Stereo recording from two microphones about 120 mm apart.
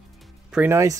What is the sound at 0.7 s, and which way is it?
Speech, 25° right (ahead or behind).